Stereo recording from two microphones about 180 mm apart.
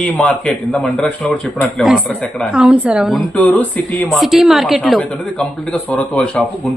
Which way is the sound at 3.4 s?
10° left (ahead or behind).